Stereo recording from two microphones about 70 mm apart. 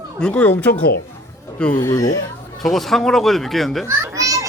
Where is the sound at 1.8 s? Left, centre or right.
Left.